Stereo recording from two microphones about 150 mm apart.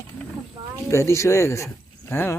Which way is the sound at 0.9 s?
20° left (ahead or behind).